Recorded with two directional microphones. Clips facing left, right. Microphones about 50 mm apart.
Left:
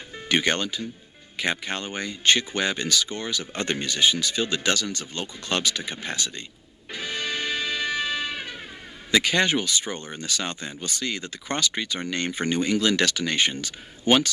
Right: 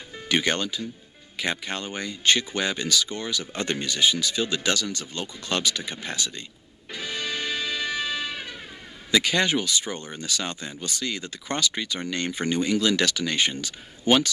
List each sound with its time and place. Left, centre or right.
0.3 s speech: left
6.9 s music: left
9.1 s speech: left